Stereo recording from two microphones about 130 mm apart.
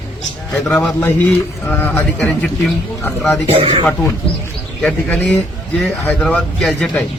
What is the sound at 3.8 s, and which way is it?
A man's voice, 10° left (ahead or behind).